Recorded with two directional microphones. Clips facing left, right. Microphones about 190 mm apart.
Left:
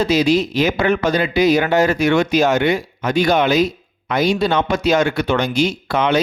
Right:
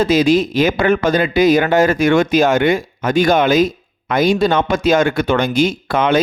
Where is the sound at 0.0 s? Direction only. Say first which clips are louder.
Right 3 dB; 50° right (ahead or behind).